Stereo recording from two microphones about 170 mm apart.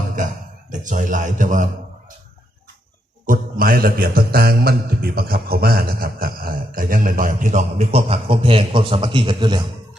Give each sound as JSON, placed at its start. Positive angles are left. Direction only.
{"t": 0.7, "sound": "a man's voice", "side_deg": -45}
{"t": 3.2, "sound": "mantra", "side_deg": -55}